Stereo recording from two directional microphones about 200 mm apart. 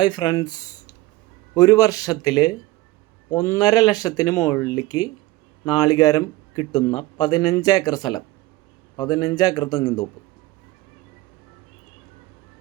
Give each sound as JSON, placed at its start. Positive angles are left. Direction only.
{"t": 0.0, "sound": "speech", "side_deg": 20}